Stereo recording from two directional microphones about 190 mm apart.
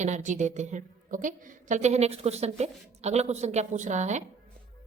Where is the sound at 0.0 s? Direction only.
40° right (ahead or behind).